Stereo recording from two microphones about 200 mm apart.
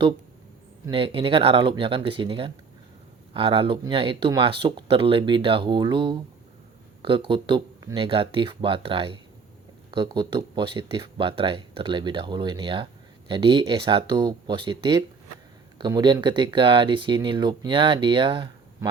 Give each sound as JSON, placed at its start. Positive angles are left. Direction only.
{"t": 0.9, "sound": "speech", "side_deg": -25}